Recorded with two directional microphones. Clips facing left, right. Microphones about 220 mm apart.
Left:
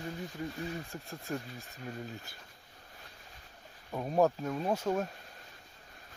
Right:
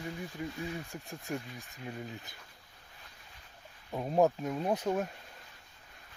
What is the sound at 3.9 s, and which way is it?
Speech, 15° right (ahead or behind).